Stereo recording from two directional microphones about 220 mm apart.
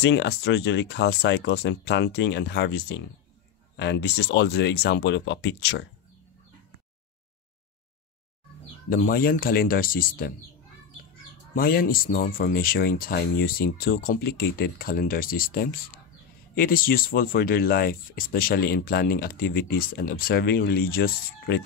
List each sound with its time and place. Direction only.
0.0 s speech: 50° left (ahead or behind)
8.9 s speech: 40° left (ahead or behind)
11.5 s speech: 40° left (ahead or behind)